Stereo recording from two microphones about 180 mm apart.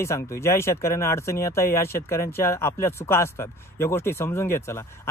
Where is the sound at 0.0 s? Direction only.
15° left (ahead or behind).